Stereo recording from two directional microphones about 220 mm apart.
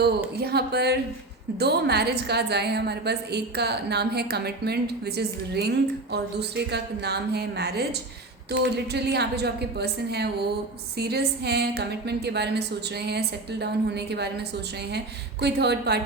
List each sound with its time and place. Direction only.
0.3 s a woman's voice: 45° right (ahead or behind)